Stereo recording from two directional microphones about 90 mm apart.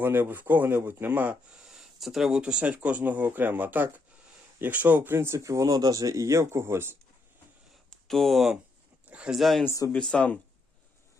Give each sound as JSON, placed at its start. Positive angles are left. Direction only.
{"t": 0.0, "sound": "speech", "side_deg": -20}
{"t": 1.6, "sound": "speech", "side_deg": -5}
{"t": 7.9, "sound": "speech", "side_deg": 5}
{"t": 9.0, "sound": "speech", "side_deg": -10}
{"t": 9.9, "sound": "speech", "side_deg": 10}